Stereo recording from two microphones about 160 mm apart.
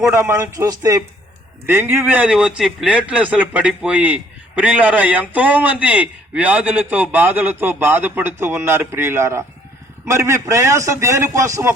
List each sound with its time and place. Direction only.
0.1 s a man's voice: 15° right (ahead or behind)